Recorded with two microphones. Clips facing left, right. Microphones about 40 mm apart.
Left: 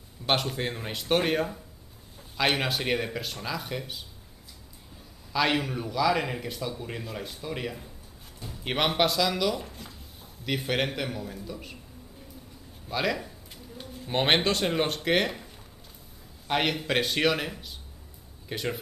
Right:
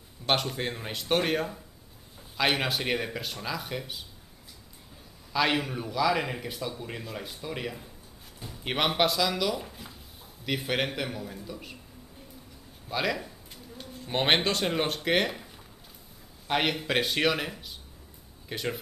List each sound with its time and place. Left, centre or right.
0.3 s speech: centre
5.3 s speech: centre
12.8 s speech: centre